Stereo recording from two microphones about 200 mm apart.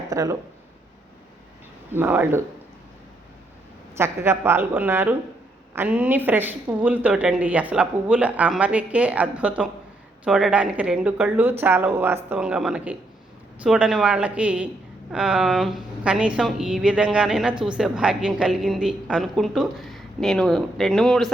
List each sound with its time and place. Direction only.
0.1 s speech: 15° right (ahead or behind)
1.9 s speech: 10° right (ahead or behind)
3.9 s a woman's voice: 10° right (ahead or behind)